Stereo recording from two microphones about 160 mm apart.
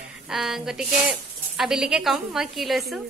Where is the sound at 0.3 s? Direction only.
5° right (ahead or behind).